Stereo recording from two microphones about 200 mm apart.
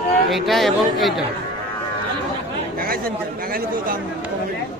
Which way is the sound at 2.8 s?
45° right (ahead or behind).